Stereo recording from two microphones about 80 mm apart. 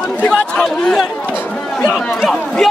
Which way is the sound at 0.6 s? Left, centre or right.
Centre.